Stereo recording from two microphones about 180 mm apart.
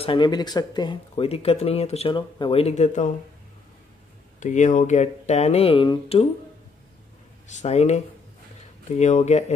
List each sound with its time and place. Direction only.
0.0 s speech: 25° left (ahead or behind)
4.4 s speech: 45° left (ahead or behind)
7.4 s speech: 40° left (ahead or behind)